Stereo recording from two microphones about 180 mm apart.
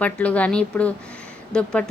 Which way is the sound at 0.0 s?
5° left (ahead or behind).